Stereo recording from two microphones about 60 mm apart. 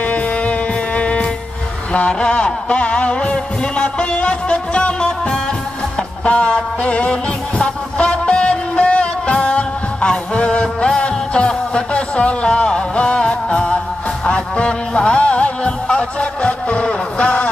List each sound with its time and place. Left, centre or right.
0.0 s music: left